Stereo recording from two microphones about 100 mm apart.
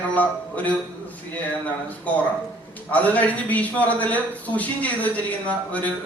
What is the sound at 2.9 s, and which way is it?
Speech, 15° left (ahead or behind).